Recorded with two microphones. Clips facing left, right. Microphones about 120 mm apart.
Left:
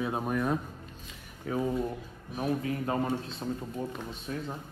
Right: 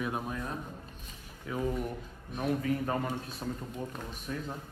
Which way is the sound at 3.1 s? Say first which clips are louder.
Left 4 dB; 25° left (ahead or behind).